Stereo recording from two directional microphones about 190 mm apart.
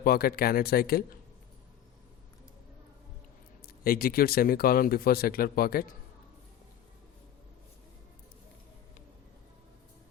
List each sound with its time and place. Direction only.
0.0 s speech: 55° left (ahead or behind)
3.8 s speech: 50° left (ahead or behind)